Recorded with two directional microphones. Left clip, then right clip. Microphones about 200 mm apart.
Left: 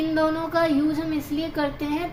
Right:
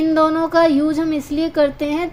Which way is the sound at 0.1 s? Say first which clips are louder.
Right 8 dB; 60° right (ahead or behind).